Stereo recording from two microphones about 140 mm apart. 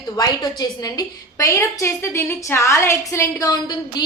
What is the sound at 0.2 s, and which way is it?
A woman's voice, 30° left (ahead or behind).